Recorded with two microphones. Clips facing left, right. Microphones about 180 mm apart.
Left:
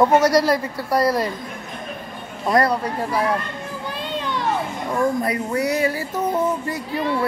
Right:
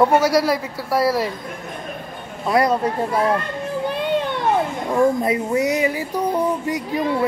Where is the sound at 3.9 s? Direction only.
55° right (ahead or behind).